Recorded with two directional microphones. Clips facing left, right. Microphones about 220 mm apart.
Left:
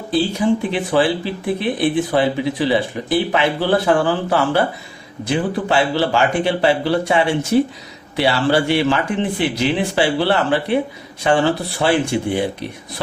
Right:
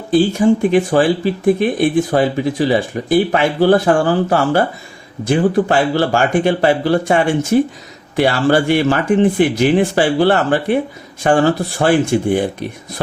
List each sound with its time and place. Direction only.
0.1 s speech: 50° right (ahead or behind)